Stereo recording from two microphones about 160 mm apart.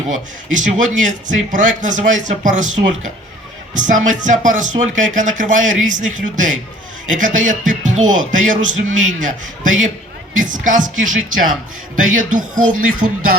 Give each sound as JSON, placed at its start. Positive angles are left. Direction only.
{"t": 0.5, "sound": "speech", "side_deg": -50}
{"t": 11.9, "sound": "a man's voice", "side_deg": -55}